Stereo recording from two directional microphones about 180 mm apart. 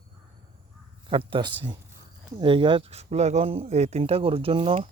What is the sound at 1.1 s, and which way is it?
A man's voice, 30° right (ahead or behind).